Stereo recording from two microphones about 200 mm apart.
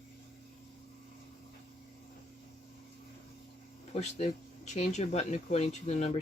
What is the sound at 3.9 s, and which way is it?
Speech, 35° left (ahead or behind).